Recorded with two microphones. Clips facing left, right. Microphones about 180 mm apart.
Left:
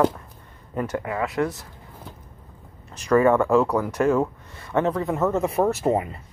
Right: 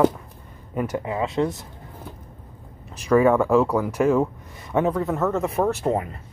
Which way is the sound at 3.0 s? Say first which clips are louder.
Right 1 dB; 5° right (ahead or behind).